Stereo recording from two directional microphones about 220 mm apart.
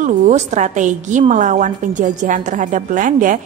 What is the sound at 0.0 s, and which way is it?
A woman's voice, 35° right (ahead or behind).